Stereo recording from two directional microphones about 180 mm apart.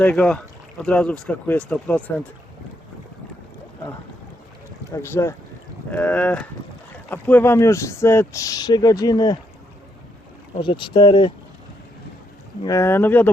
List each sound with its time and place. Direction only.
0.0 s speech: 5° left (ahead or behind)
5.0 s speech: 15° left (ahead or behind)
10.6 s speech: 25° left (ahead or behind)
12.6 s speech: 15° left (ahead or behind)